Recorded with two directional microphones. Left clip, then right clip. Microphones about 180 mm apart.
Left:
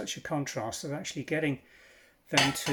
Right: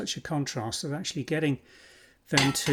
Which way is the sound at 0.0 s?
35° right (ahead or behind).